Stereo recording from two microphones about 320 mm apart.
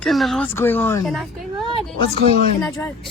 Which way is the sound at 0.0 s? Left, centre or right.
Centre.